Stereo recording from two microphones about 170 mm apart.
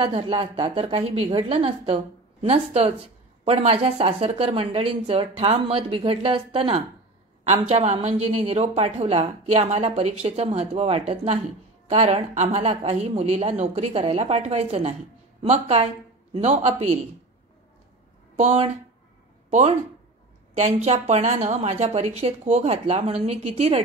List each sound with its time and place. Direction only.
0.0 s a woman's voice: 35° right (ahead or behind)
18.4 s a woman's voice: 40° right (ahead or behind)
20.5 s a woman's voice: 40° right (ahead or behind)